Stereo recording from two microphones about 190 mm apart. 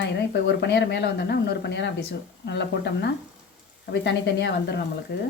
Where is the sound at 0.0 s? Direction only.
65° left (ahead or behind).